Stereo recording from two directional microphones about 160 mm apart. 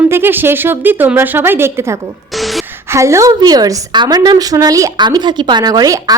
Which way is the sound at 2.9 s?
20° right (ahead or behind).